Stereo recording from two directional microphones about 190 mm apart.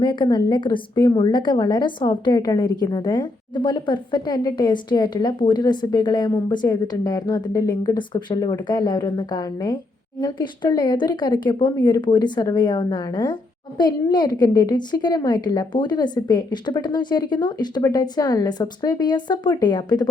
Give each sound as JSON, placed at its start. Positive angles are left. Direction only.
{"t": 0.0, "sound": "a woman's voice", "side_deg": 25}